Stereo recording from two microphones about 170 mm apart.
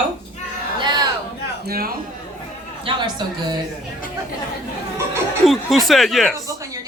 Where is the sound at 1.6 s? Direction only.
60° right (ahead or behind).